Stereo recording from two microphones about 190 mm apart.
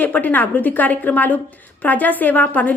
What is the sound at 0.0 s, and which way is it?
A woman's voice, 10° left (ahead or behind).